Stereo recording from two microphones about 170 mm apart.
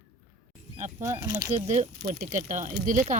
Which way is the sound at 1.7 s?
45° right (ahead or behind).